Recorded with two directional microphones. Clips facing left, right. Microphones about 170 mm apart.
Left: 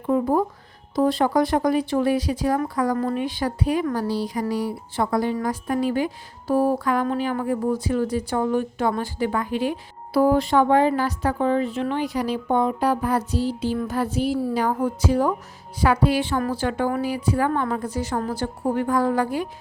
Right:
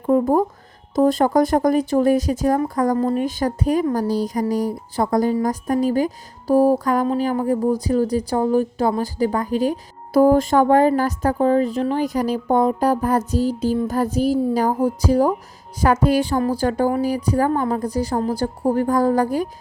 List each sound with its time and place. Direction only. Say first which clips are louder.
0.0 s a woman's voice: right 4 dB; 40° right (ahead or behind)